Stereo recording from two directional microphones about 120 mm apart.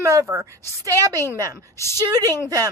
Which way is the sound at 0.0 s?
30° right (ahead or behind).